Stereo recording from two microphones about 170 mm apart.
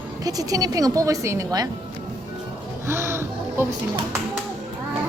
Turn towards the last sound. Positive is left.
turn(degrees=-15)  # may be behind; listen again after turning